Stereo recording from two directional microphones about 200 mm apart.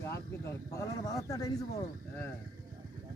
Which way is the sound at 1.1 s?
15° left (ahead or behind).